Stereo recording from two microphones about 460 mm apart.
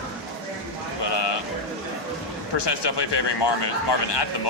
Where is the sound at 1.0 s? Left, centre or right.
Left.